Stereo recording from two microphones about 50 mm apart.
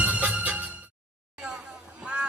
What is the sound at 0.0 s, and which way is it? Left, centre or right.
Music, right.